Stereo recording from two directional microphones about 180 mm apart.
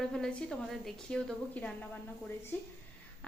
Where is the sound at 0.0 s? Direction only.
5° left (ahead or behind).